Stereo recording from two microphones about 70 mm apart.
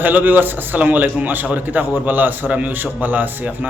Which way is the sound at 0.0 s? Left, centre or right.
Right.